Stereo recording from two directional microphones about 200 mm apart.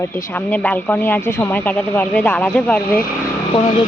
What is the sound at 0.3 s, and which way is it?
Speech, 10° left (ahead or behind).